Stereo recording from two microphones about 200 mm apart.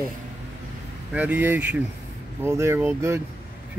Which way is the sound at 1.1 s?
10° right (ahead or behind).